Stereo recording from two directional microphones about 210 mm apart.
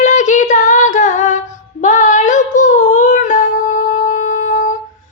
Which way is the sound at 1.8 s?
35° left (ahead or behind).